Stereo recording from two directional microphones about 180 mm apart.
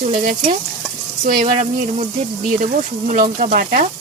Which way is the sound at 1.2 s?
45° right (ahead or behind).